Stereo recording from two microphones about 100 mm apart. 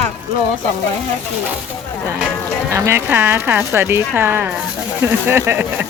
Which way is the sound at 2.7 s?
30° right (ahead or behind).